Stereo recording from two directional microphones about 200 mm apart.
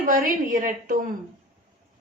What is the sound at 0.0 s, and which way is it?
Speech, 40° right (ahead or behind).